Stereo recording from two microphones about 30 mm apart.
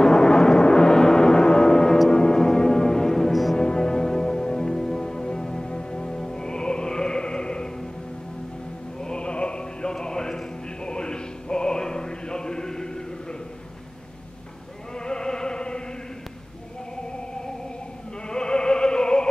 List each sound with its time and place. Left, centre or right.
0.0 s gong: left
2.0 s music: left; by 3.3 s centre
3.5 s music: left
9.0 s music: left
15.0 s music: left
18.3 s music: left